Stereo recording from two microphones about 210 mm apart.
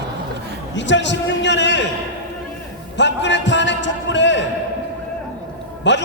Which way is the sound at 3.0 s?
55° left (ahead or behind).